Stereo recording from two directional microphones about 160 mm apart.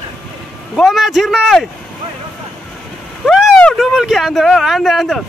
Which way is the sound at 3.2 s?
5° left (ahead or behind).